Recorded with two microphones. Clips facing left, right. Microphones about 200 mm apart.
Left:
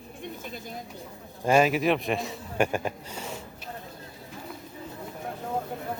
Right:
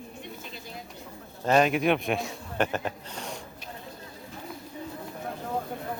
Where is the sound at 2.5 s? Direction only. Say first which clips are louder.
Left 2 dB; 10° left (ahead or behind).